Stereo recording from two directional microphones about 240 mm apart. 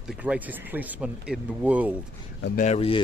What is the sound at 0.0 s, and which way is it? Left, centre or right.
Speech, centre.